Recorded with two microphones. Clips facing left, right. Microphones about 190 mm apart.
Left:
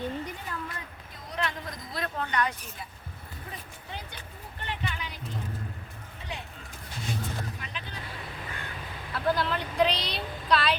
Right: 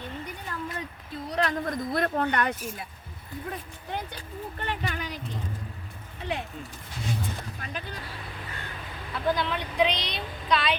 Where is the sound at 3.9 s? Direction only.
55° right (ahead or behind).